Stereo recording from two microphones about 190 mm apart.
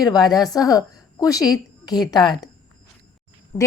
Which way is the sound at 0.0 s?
20° left (ahead or behind).